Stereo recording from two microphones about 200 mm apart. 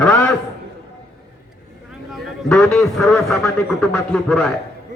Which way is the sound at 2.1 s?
Centre (ahead or behind).